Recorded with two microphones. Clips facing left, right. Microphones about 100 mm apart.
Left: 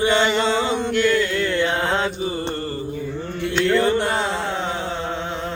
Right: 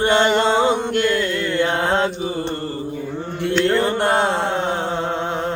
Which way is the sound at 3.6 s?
45° right (ahead or behind).